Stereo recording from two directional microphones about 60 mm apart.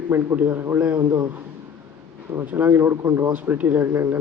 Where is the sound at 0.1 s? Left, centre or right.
Right.